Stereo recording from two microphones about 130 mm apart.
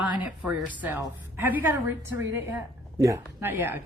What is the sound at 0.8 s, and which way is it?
A woman's voice, 15° right (ahead or behind).